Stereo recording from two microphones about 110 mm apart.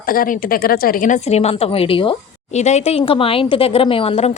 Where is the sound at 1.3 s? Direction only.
65° left (ahead or behind).